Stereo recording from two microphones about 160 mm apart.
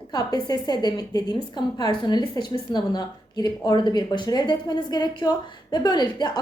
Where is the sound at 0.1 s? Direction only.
25° left (ahead or behind).